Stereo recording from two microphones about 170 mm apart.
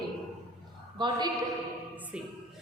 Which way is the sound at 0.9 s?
25° right (ahead or behind).